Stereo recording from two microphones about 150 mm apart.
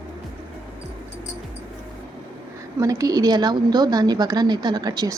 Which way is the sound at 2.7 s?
20° right (ahead or behind).